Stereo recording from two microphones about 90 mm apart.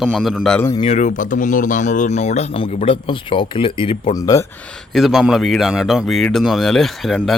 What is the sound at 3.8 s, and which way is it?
Speech, 90° left.